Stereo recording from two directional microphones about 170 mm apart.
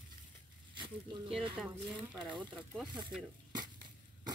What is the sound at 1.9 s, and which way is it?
Speech, centre (ahead or behind).